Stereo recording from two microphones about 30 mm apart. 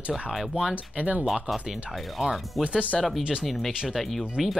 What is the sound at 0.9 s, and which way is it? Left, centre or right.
Speech, right.